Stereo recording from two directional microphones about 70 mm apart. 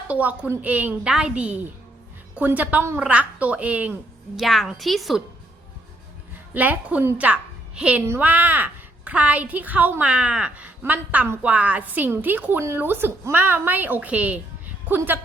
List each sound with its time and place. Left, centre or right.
0.1 s a woman's voice: right
1.0 s a woman's voice: centre
4.4 s a woman's voice: centre
6.5 s a woman's voice: right